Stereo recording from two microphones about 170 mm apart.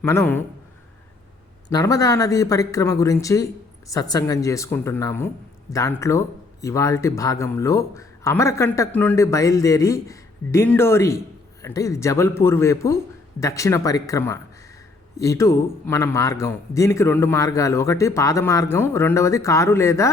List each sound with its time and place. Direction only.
0.0 s speech: 15° left (ahead or behind)
1.7 s speech: 20° left (ahead or behind)